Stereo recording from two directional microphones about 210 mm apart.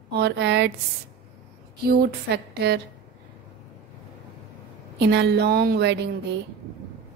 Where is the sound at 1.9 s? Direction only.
45° right (ahead or behind).